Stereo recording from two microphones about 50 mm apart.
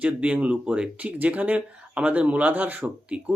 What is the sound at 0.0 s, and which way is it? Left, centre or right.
Speech, right.